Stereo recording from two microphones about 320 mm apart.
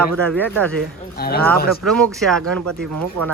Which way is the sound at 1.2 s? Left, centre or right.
Left.